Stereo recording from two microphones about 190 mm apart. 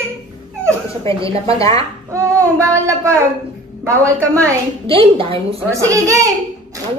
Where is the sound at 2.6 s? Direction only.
15° right (ahead or behind).